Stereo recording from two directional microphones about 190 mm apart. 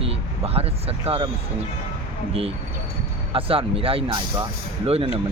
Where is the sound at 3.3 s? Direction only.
30° right (ahead or behind).